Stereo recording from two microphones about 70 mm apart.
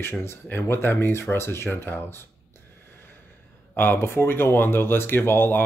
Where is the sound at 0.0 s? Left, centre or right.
Left.